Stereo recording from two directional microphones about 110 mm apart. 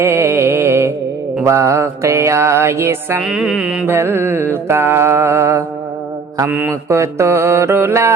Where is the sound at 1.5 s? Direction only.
25° right (ahead or behind).